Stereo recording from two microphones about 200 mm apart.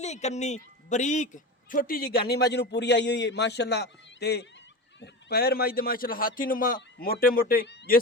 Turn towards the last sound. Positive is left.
turn(degrees=50)  # may be behind; listen again after turning